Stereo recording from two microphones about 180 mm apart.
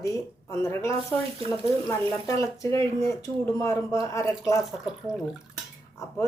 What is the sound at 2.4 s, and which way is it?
Speech, 15° left (ahead or behind).